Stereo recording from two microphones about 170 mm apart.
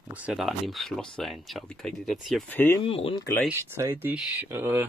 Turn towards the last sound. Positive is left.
turn(degrees=-15)  # may be behind; listen again after turning